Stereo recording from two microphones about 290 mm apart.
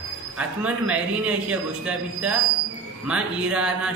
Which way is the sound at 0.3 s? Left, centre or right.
Centre.